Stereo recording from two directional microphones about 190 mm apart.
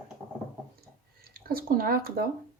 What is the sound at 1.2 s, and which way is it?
Speech, 50° right (ahead or behind).